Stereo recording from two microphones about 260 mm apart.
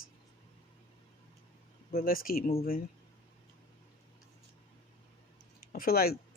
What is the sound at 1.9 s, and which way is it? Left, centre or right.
Speech, left.